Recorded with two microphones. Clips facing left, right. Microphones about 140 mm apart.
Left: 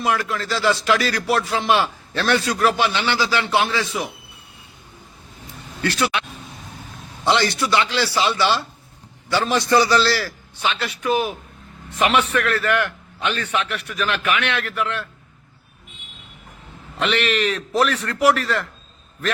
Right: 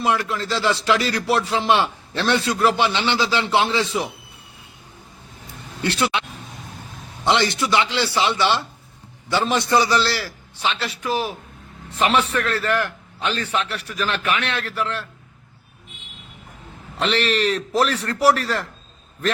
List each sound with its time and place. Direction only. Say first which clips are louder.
0.0 s a man's voice: even; 25° right (ahead or behind)
5.8 s speech: even; 25° right (ahead or behind)
7.3 s a man's voice: even; 20° right (ahead or behind)
17.0 s a man's voice: even; 35° right (ahead or behind)